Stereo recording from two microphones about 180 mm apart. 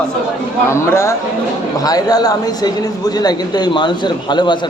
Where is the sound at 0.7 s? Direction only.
15° left (ahead or behind).